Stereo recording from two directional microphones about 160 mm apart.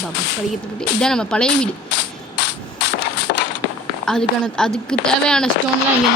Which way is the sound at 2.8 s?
90° left.